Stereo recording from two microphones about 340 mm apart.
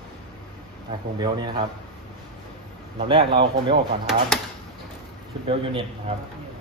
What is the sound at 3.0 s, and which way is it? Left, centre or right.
Speech, centre.